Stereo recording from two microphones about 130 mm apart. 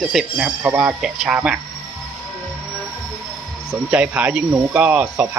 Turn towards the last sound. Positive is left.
turn(degrees=-15)  # may be behind; listen again after turning